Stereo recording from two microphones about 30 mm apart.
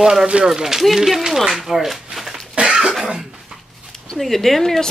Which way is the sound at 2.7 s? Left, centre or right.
Centre.